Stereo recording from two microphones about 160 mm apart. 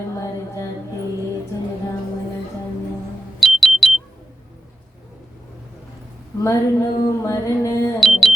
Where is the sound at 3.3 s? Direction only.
Centre (ahead or behind).